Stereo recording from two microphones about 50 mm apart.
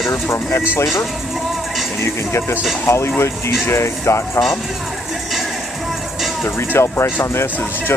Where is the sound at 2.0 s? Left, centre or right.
Left.